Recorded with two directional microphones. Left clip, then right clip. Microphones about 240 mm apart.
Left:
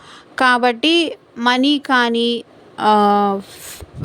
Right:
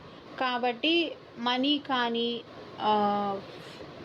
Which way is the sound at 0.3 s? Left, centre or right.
Left.